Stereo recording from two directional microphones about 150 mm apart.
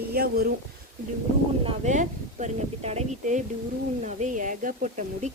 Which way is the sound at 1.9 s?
50° right (ahead or behind).